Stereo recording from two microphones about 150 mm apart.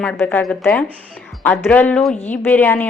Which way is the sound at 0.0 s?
10° left (ahead or behind).